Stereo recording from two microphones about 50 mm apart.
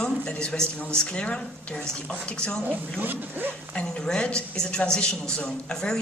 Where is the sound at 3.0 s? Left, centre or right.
Right.